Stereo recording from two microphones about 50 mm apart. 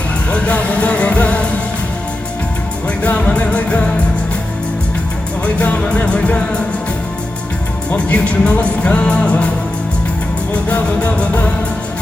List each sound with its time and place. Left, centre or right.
0.3 s music: left
3.0 s music: left
5.5 s music: left
7.9 s music: left
10.5 s music: left